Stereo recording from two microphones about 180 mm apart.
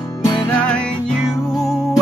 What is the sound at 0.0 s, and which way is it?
Music, 20° left (ahead or behind).